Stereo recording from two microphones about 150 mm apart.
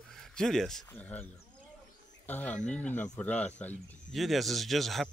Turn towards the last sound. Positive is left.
turn(degrees=0)  # may be behind; listen again after turning